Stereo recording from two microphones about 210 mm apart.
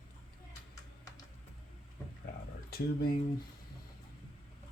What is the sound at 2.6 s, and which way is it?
Speech, 45° left (ahead or behind).